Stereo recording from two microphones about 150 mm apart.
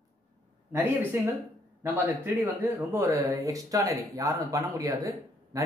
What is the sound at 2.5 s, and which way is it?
Speech, 15° right (ahead or behind).